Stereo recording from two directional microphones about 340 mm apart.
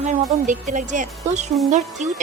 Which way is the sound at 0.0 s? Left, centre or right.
Right.